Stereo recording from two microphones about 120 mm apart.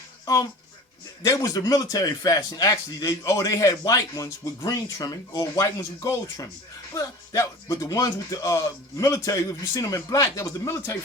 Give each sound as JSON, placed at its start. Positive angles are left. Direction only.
{"t": 1.2, "sound": "a man's voice", "side_deg": 30}